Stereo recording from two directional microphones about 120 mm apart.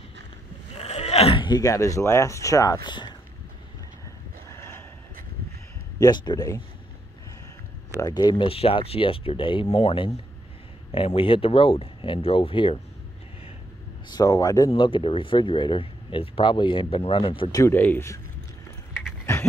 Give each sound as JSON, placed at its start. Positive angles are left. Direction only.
{"t": 0.7, "sound": "a sound", "side_deg": 60}
{"t": 1.4, "sound": "speech", "side_deg": 35}
{"t": 5.9, "sound": "speech", "side_deg": 35}
{"t": 8.0, "sound": "speech", "side_deg": 35}
{"t": 8.5, "sound": "speech", "side_deg": 50}
{"t": 9.7, "sound": "speech", "side_deg": 55}
{"t": 14.0, "sound": "speech", "side_deg": 35}
{"t": 14.7, "sound": "speech", "side_deg": 45}
{"t": 17.7, "sound": "speech", "side_deg": 15}